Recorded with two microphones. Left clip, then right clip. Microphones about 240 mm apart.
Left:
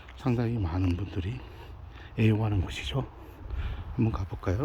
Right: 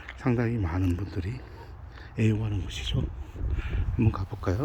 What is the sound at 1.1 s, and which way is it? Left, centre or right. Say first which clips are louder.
Speech: right 1 dB; left.